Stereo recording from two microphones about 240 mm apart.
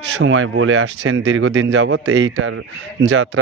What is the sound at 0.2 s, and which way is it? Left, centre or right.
Speech, right.